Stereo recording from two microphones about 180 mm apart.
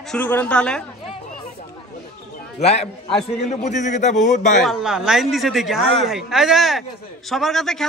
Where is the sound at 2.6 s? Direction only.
35° left (ahead or behind).